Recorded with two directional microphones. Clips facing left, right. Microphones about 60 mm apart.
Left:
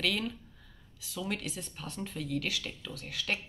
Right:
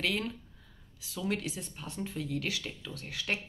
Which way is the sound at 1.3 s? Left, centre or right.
Right.